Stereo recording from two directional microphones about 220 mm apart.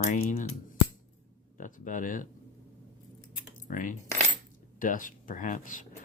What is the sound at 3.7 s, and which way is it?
Speech, 35° left (ahead or behind).